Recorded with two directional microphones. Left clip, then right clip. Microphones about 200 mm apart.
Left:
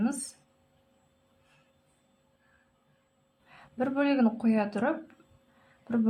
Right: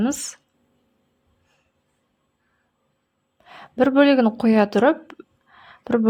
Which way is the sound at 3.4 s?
40° right (ahead or behind).